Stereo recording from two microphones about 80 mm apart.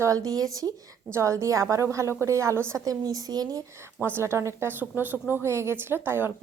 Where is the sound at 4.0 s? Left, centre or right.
Right.